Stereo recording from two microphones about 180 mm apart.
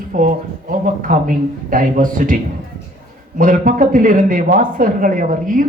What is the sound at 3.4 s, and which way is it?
A man's voice, 50° right (ahead or behind).